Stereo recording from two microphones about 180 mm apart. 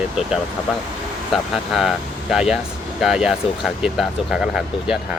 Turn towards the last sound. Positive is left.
turn(degrees=0)  # may be behind; listen again after turning